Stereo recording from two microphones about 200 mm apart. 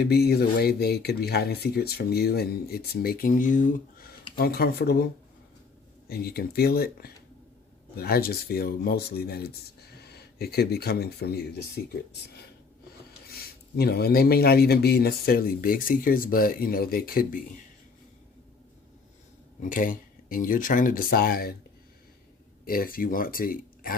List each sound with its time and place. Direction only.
0.1 s speech: 55° left (ahead or behind)
6.1 s speech: 50° left (ahead or behind)
13.3 s speech: 50° left (ahead or behind)
19.6 s speech: 40° left (ahead or behind)
22.6 s speech: 45° left (ahead or behind)